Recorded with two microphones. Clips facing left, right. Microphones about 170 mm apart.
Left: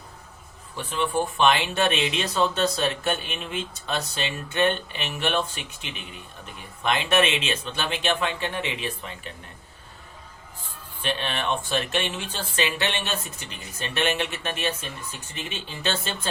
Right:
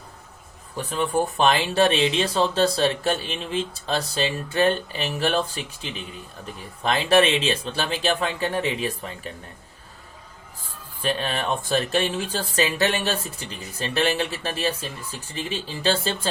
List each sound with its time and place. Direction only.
0.8 s speech: 40° right (ahead or behind)
11.0 s speech: 40° right (ahead or behind)